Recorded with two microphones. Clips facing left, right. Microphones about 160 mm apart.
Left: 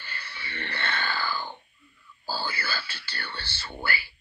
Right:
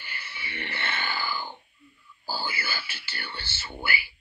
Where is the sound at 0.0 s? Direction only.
15° right (ahead or behind).